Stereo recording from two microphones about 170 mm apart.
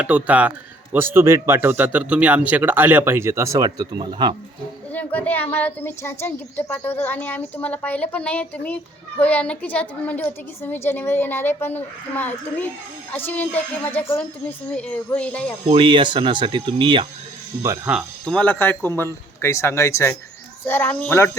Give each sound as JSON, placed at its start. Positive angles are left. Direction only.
{"t": 0.0, "sound": "speech", "side_deg": -5}
{"t": 4.9, "sound": "a woman's voice", "side_deg": 10}
{"t": 15.7, "sound": "speech", "side_deg": -30}
{"t": 17.6, "sound": "speech", "side_deg": -15}
{"t": 17.9, "sound": "a woman's voice", "side_deg": 5}